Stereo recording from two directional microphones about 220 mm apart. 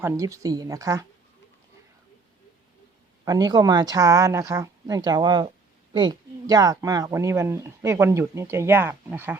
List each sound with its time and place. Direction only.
0.0 s speech: 15° right (ahead or behind)
3.2 s speech: 15° right (ahead or behind)